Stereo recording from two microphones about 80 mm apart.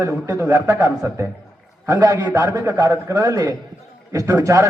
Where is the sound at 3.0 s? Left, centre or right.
Right.